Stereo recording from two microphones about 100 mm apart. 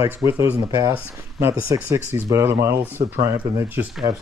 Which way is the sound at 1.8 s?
20° right (ahead or behind).